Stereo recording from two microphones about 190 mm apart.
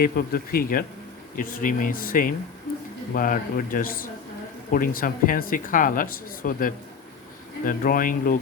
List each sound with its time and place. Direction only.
0.0 s speech: 50° left (ahead or behind)